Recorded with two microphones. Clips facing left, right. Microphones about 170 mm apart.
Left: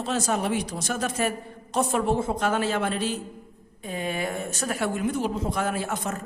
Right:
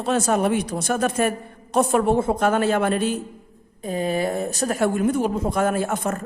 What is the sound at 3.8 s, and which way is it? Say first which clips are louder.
A woman's voice: right 6 dB; 40° right (ahead or behind).